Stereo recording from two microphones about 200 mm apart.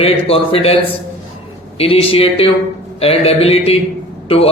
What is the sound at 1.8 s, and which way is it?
A man's voice, 30° left (ahead or behind).